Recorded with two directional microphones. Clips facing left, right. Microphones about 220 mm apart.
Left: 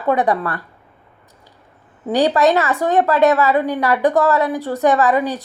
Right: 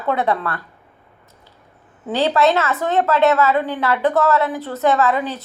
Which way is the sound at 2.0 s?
15° left (ahead or behind).